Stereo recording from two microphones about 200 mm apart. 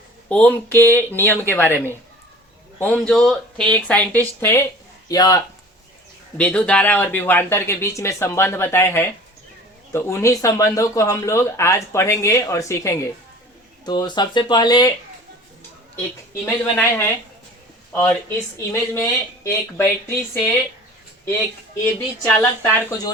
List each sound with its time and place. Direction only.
0.3 s a man's voice: 5° left (ahead or behind)
6.3 s speech: 5° left (ahead or behind)
16.5 s speech: 10° left (ahead or behind)
22.3 s speech: 10° left (ahead or behind)